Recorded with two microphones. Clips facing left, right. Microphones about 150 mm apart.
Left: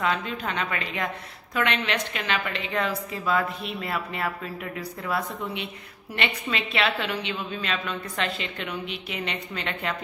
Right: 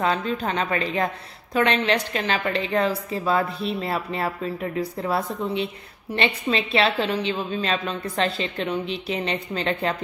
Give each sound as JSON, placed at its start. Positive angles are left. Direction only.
{"t": 0.0, "sound": "a woman's voice", "side_deg": -35}